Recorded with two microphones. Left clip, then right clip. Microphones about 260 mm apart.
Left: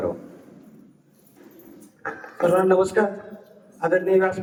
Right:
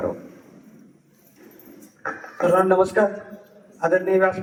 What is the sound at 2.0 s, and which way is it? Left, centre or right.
A man's voice, centre.